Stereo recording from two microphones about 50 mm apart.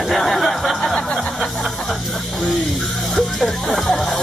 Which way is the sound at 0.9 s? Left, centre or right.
Centre.